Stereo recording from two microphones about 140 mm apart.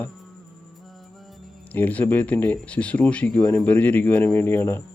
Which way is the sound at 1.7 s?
10° left (ahead or behind).